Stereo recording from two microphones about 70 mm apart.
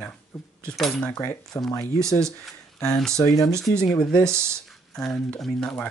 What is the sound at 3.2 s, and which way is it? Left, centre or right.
Speech, left.